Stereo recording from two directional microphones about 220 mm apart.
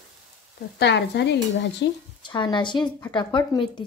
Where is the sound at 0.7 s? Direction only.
50° left (ahead or behind).